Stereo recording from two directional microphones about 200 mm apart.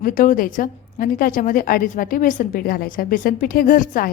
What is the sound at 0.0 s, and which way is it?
A woman's voice, 40° left (ahead or behind).